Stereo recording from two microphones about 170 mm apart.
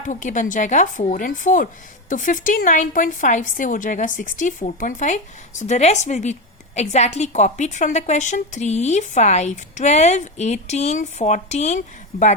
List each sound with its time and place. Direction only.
0.0 s a woman's voice: 50° left (ahead or behind)